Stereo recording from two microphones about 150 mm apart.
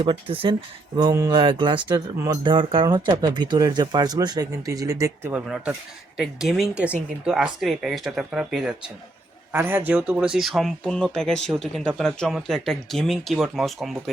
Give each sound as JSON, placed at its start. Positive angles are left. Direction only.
{"t": 0.0, "sound": "speech", "side_deg": -35}
{"t": 0.9, "sound": "speech", "side_deg": -25}
{"t": 1.4, "sound": "speech", "side_deg": -35}
{"t": 2.1, "sound": "speech", "side_deg": -20}
{"t": 5.3, "sound": "speech", "side_deg": -5}